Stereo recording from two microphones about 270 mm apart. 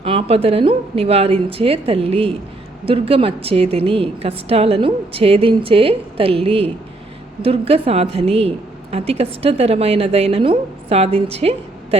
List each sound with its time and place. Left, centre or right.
0.0 s a woman's voice: right